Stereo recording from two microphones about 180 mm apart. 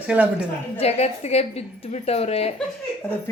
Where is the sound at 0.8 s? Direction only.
35° left (ahead or behind).